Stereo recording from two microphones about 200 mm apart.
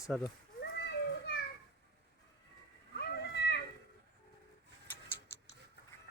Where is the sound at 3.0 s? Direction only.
55° left (ahead or behind).